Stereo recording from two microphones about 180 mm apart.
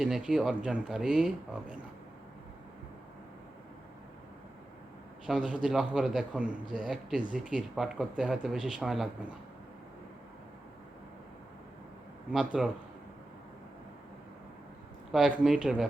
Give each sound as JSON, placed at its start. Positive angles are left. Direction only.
{"t": 0.0, "sound": "a man's voice", "side_deg": -5}
{"t": 5.2, "sound": "a man's voice", "side_deg": -5}
{"t": 12.3, "sound": "a man's voice", "side_deg": -5}
{"t": 15.1, "sound": "a man's voice", "side_deg": -5}